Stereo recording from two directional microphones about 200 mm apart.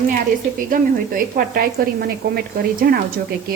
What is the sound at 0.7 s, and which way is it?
A woman's voice, 45° right (ahead or behind).